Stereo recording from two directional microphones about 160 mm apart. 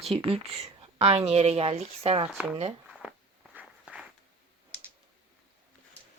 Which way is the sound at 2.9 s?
5° right (ahead or behind).